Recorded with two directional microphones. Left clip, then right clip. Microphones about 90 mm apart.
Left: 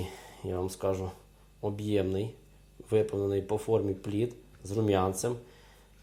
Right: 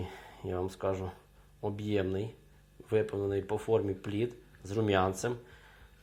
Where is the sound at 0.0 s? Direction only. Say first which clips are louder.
Left 2 dB; 30° left (ahead or behind).